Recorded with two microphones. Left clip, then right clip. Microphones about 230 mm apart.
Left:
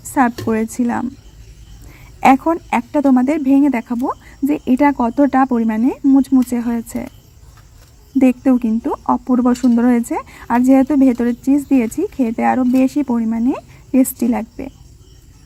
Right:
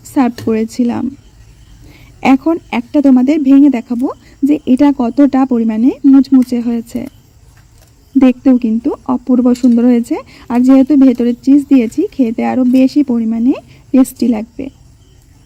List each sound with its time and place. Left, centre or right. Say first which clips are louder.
0.1 s speech: right 2 dB; centre
2.2 s speech: even; centre
8.2 s speech: right 4 dB; centre